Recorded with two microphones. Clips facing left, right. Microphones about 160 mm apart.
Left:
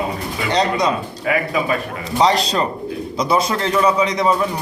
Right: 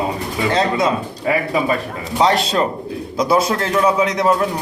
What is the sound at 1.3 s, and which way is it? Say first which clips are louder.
Speech: right 1 dB; 30° right (ahead or behind).